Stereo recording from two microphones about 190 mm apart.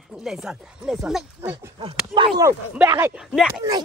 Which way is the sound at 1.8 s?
25° right (ahead or behind).